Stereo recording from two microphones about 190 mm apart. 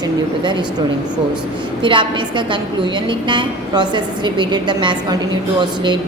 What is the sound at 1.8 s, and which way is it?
A woman's voice, 25° right (ahead or behind).